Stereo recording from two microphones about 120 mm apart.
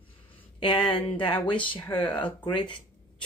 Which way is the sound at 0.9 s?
45° left (ahead or behind).